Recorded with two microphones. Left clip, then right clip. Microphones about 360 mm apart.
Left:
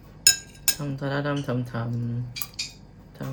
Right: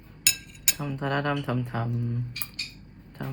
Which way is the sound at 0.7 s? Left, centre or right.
Centre.